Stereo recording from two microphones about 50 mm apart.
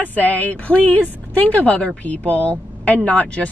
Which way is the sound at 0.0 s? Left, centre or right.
Left.